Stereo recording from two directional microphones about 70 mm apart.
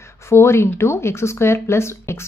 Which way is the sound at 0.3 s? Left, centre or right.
Left.